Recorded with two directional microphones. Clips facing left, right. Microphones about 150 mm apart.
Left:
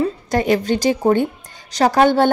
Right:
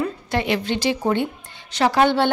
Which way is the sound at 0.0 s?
40° left (ahead or behind).